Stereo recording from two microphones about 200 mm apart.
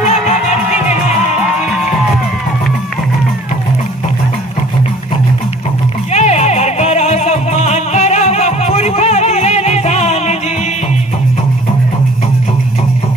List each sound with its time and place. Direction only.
0.0 s music: 35° left (ahead or behind)
6.1 s music: 35° left (ahead or behind)